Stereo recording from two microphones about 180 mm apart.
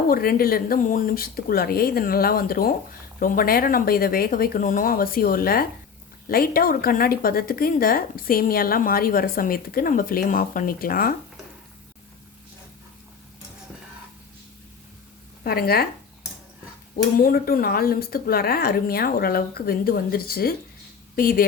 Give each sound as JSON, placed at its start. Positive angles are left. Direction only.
{"t": 0.1, "sound": "a woman's voice", "side_deg": 55}
{"t": 15.4, "sound": "a woman's voice", "side_deg": 60}
{"t": 16.9, "sound": "a woman's voice", "side_deg": 55}